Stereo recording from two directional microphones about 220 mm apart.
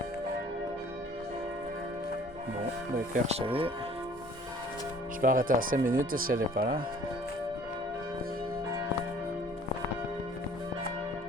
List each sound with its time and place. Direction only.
3.2 s speech: 25° right (ahead or behind)
5.2 s speech: 40° right (ahead or behind)